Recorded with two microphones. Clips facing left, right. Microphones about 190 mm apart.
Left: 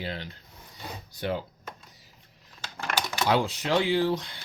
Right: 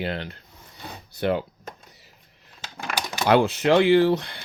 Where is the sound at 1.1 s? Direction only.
65° right (ahead or behind).